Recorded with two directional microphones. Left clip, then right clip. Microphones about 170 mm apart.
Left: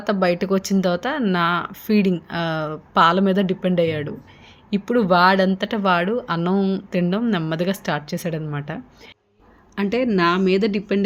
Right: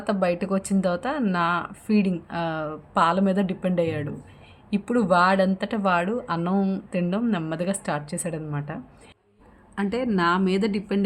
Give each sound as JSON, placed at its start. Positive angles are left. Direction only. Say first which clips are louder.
{"t": 0.0, "sound": "speech", "louder": "left 4 dB", "side_deg": 20}